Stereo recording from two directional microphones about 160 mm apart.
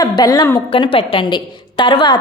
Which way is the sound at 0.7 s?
35° left (ahead or behind).